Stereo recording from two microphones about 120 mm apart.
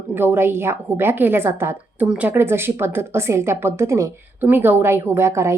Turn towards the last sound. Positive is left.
turn(degrees=-25)  # may be behind; listen again after turning